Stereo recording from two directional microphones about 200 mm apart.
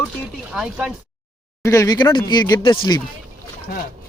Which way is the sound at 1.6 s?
15° left (ahead or behind).